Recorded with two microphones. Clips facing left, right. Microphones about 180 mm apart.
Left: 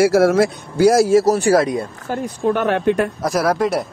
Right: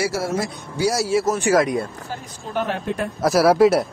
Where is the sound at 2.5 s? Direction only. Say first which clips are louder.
Left 8 dB; 65° left (ahead or behind).